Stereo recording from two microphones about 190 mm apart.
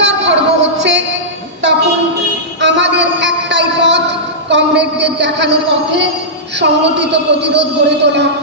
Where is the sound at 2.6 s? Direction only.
65° right (ahead or behind).